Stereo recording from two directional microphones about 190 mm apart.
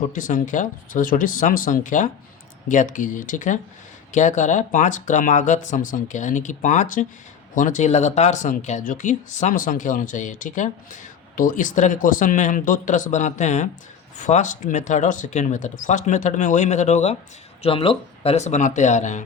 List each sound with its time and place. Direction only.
0.1 s speech: 40° left (ahead or behind)